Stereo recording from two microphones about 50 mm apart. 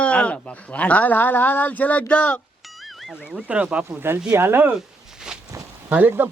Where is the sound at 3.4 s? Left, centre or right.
Right.